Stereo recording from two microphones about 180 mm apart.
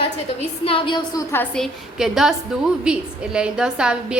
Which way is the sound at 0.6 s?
30° left (ahead or behind).